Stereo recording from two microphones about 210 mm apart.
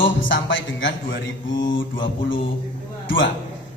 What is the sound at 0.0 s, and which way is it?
Speech, 65° left (ahead or behind).